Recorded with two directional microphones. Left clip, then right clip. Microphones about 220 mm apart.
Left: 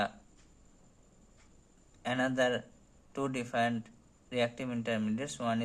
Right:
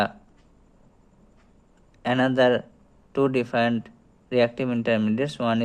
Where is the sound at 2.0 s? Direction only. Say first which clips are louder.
Right 10 dB; 35° right (ahead or behind).